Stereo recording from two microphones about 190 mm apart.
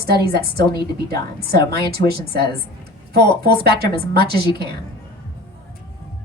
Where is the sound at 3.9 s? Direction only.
25° left (ahead or behind).